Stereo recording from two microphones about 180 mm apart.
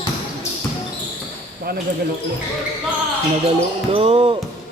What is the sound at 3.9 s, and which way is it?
Speech, 30° right (ahead or behind).